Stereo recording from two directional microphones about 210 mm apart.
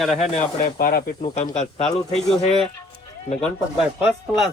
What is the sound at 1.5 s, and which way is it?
Speech, 30° left (ahead or behind).